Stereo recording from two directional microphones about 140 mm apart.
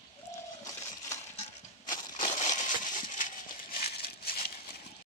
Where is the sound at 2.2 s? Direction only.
60° left (ahead or behind).